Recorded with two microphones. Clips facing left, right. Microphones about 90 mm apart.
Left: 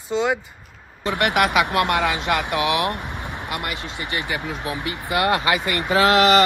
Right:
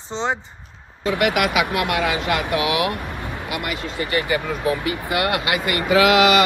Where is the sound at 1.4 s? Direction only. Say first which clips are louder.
Left 2 dB; 40° left (ahead or behind).